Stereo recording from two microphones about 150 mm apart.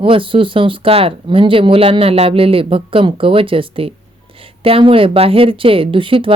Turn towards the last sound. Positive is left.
turn(degrees=-35)  # may be behind; listen again after turning